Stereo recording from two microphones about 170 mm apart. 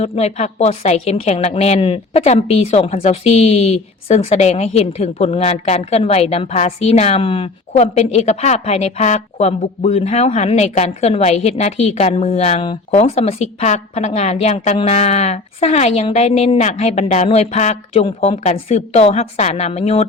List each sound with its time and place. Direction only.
0.0 s a woman's voice: 40° left (ahead or behind)